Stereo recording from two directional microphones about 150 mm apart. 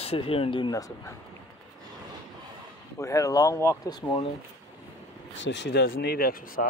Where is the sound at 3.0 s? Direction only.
20° left (ahead or behind).